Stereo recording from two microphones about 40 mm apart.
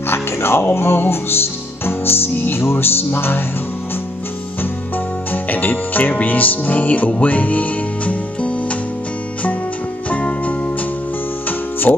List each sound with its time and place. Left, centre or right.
0.0 s music: left
1.9 s music: left
4.9 s music: left
6.1 s speech: left
10.0 s music: left